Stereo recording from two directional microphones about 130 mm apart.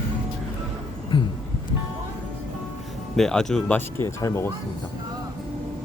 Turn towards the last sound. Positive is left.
turn(degrees=20)  # may be behind; listen again after turning